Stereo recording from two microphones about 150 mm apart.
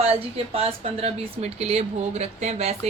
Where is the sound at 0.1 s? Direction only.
40° right (ahead or behind).